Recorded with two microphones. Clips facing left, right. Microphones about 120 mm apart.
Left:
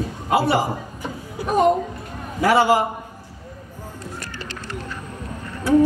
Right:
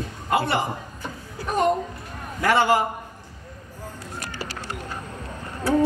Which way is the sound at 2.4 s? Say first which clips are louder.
Left 3 dB; 5° left (ahead or behind).